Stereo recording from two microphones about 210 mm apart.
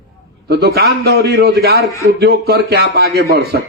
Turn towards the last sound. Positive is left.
turn(degrees=-45)  # may be behind; listen again after turning